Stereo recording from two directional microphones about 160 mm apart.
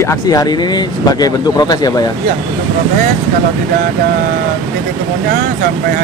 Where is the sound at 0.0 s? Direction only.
20° left (ahead or behind).